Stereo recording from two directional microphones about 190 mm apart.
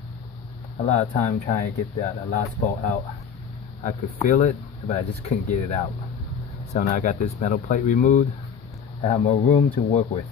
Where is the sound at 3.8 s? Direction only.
45° left (ahead or behind).